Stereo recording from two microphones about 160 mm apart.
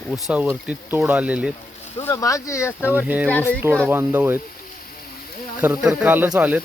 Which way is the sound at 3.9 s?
10° right (ahead or behind).